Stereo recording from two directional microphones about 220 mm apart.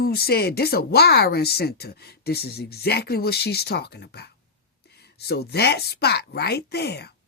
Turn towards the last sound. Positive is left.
turn(degrees=50)  # may be behind; listen again after turning